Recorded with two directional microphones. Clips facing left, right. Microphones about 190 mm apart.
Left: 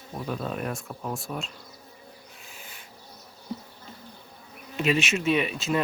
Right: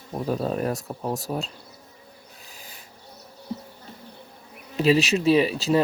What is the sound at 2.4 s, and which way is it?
Owl, 35° right (ahead or behind).